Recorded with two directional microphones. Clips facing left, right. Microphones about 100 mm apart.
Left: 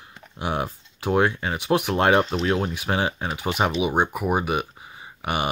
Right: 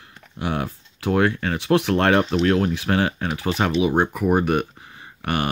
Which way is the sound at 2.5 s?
10° left (ahead or behind).